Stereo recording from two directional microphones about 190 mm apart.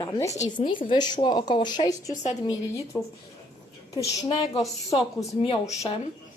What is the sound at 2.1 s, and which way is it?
Speech, 40° left (ahead or behind).